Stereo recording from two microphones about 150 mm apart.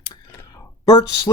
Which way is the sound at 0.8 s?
30° left (ahead or behind).